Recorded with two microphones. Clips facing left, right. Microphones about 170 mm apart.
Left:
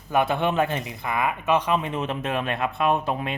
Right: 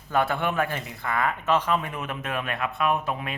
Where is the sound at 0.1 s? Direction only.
20° left (ahead or behind).